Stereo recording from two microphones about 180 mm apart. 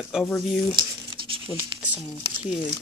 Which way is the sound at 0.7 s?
25° right (ahead or behind).